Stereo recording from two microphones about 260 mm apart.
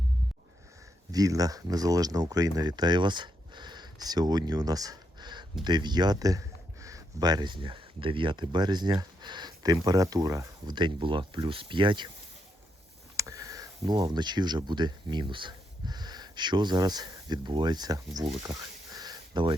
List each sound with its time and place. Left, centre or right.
1.1 s speech: centre
13.1 s speech: centre
18.9 s a sound: centre